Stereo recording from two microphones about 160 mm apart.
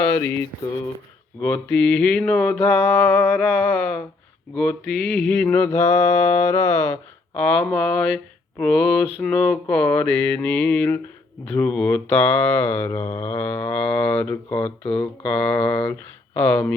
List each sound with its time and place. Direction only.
0.0 s mantra: 15° left (ahead or behind)
1.4 s mantra: 10° left (ahead or behind)